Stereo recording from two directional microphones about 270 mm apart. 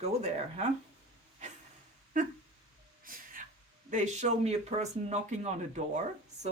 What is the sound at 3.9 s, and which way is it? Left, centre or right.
Speech, right.